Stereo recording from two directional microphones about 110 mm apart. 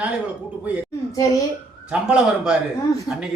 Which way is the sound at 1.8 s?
5° right (ahead or behind).